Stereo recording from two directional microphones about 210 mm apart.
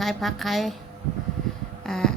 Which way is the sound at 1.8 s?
Centre (ahead or behind).